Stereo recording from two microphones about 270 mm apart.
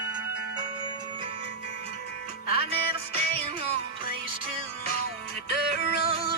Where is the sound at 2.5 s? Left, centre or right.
Right.